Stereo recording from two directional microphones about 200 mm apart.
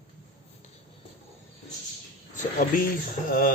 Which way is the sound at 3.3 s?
45° left (ahead or behind).